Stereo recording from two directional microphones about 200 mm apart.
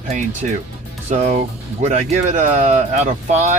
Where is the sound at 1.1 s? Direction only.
35° right (ahead or behind).